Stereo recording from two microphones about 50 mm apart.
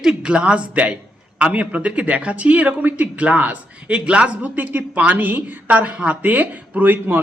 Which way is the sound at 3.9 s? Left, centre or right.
Right.